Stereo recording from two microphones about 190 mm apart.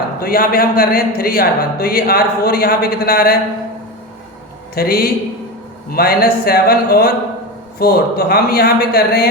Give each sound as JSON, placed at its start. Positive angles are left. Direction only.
{"t": 0.2, "sound": "speech", "side_deg": 50}
{"t": 4.7, "sound": "speech", "side_deg": 55}